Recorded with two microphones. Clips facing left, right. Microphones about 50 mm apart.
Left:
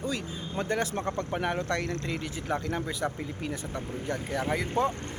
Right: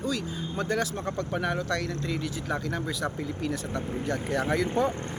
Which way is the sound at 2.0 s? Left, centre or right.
Left.